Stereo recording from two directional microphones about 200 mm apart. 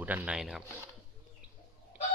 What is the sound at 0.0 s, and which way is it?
Speech, 10° right (ahead or behind).